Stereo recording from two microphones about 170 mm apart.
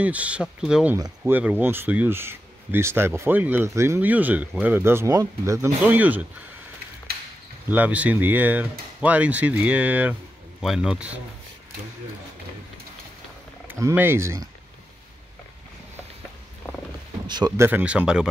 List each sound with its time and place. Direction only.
0.0 s speech: 10° right (ahead or behind)
0.9 s speech: 20° right (ahead or behind)
1.3 s speech: 10° right (ahead or behind)
7.7 s speech: 10° right (ahead or behind)
13.7 s speech: 15° right (ahead or behind)
17.6 s speech: 10° right (ahead or behind)